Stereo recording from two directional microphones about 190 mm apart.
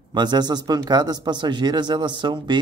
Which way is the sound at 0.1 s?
20° right (ahead or behind).